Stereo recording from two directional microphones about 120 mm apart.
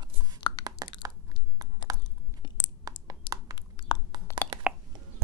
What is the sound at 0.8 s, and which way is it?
Crunch, 30° right (ahead or behind).